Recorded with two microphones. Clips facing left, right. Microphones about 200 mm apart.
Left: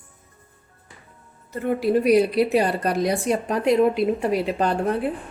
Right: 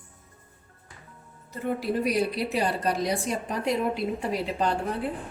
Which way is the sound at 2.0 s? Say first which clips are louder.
Left 10 dB; 65° left (ahead or behind).